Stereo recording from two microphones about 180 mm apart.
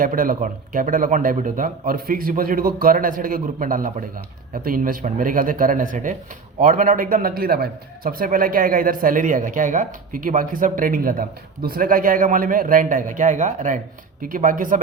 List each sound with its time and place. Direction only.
0.0 s a man's voice: 50° right (ahead or behind)